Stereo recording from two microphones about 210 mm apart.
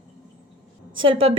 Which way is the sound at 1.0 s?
25° right (ahead or behind).